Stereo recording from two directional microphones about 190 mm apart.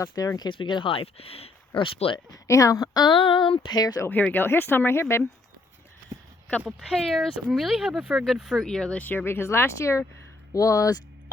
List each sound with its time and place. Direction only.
0.0 s speech: 15° left (ahead or behind)
6.7 s speech: centre (ahead or behind); by 11.0 s 20° left (ahead or behind)